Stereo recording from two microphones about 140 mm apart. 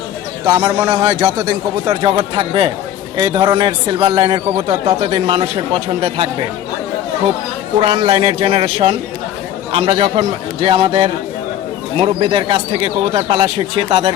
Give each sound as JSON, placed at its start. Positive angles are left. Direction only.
{"t": 0.4, "sound": "a man's voice", "side_deg": -25}
{"t": 7.8, "sound": "speech", "side_deg": -40}